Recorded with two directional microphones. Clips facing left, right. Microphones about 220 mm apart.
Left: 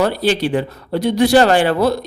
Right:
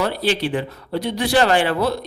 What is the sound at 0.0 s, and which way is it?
A man's voice, 45° left (ahead or behind).